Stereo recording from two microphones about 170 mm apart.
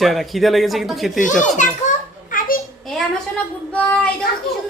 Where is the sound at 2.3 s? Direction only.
50° left (ahead or behind).